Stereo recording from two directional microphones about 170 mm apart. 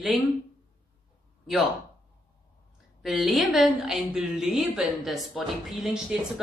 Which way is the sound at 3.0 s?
Centre (ahead or behind).